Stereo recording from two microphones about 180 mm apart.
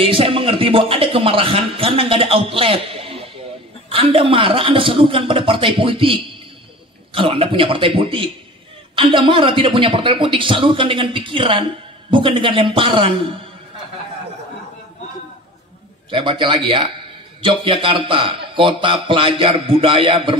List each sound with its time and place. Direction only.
0.0 s a man's voice: 30° right (ahead or behind)
16.1 s a man's voice: 30° right (ahead or behind)